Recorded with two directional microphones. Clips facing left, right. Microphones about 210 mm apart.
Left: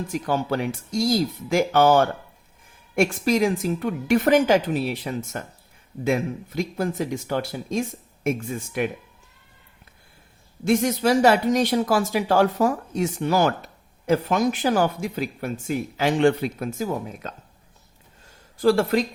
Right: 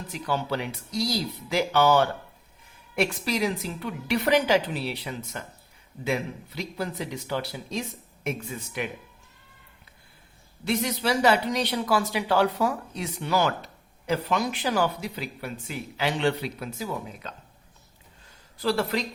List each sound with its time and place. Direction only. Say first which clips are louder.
0.1 s speech: left 3 dB; 45° left (ahead or behind)
10.6 s speech: left 7 dB; 45° left (ahead or behind)
18.6 s speech: left 7 dB; 50° left (ahead or behind)